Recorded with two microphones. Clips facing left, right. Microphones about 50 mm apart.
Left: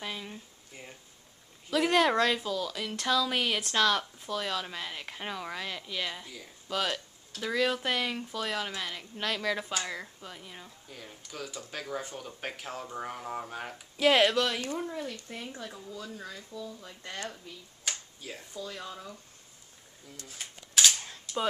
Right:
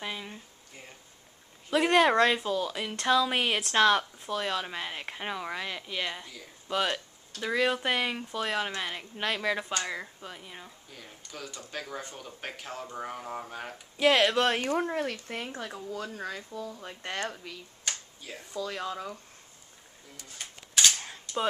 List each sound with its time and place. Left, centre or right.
0.0 s speech: centre
1.7 s speech: right
6.2 s speech: centre
6.7 s speech: centre
10.9 s speech: centre
14.4 s speech: right
14.7 s speech: right
17.4 s speech: right
17.8 s a sound: centre
18.5 s speech: right
20.2 s a sound: centre
20.9 s camera: centre